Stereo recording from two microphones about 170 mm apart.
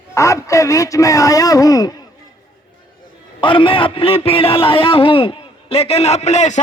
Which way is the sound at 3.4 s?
30° left (ahead or behind).